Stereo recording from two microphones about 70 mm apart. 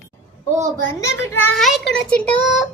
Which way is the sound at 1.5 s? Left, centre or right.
Centre.